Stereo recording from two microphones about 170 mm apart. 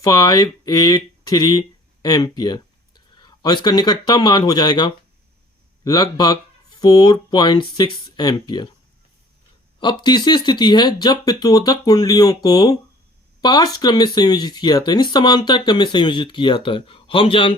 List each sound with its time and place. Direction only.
0.0 s speech: 20° left (ahead or behind)
9.8 s speech: 25° left (ahead or behind)